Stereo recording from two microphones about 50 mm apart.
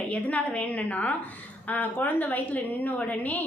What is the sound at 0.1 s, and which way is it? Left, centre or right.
A woman's voice, left.